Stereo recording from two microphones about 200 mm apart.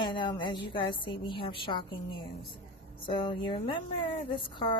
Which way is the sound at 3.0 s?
25° left (ahead or behind).